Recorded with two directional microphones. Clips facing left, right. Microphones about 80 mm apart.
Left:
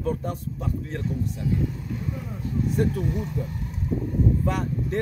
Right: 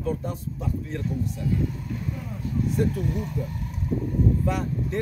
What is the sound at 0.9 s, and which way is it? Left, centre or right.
Speech, left.